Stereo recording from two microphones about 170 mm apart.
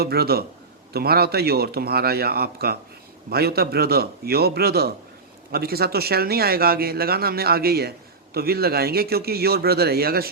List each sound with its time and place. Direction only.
0.0 s a man's voice: 65° right (ahead or behind)